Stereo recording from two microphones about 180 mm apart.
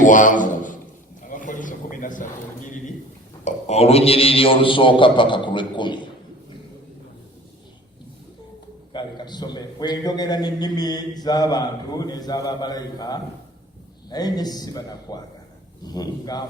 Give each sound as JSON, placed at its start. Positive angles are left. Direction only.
{"t": 0.0, "sound": "a sound", "side_deg": 45}
{"t": 3.4, "sound": "a man's voice", "side_deg": 35}
{"t": 8.9, "sound": "a man's voice", "side_deg": 25}